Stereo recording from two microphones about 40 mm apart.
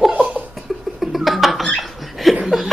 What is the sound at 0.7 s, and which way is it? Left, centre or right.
Rodents, centre.